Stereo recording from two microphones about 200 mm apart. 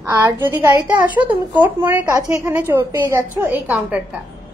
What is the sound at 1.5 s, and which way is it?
A woman's voice, 10° right (ahead or behind).